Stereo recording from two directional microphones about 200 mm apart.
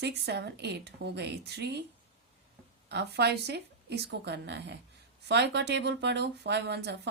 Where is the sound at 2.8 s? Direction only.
55° right (ahead or behind).